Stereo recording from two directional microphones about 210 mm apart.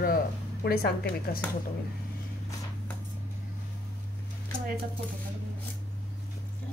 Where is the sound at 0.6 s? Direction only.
50° left (ahead or behind).